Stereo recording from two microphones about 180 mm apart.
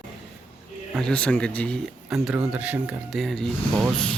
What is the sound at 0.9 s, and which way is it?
Speech, 5° left (ahead or behind).